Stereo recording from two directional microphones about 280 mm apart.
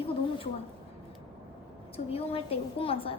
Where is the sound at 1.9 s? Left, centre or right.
Left.